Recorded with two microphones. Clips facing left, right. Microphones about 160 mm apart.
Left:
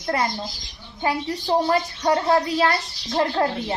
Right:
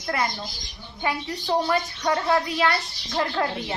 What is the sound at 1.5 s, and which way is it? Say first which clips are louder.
Speech: left 3 dB; 30° left (ahead or behind).